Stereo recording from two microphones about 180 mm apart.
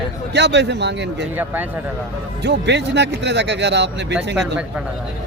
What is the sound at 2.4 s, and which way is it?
A man's voice, 75° right (ahead or behind).